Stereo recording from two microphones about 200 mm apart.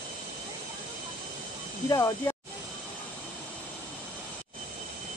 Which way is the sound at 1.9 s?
15° left (ahead or behind).